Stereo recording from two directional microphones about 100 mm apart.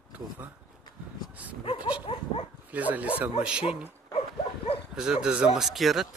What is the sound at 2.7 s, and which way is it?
A man's voice, 15° right (ahead or behind).